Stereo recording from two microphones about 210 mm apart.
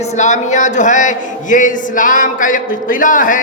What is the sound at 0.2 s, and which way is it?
A man's voice, 35° left (ahead or behind).